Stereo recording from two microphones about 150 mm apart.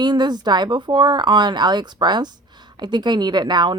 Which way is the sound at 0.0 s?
30° right (ahead or behind).